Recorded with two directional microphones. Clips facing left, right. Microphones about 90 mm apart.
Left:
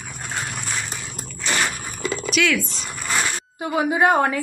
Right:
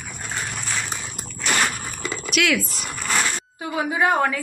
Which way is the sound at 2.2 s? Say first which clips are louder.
Even; centre (ahead or behind).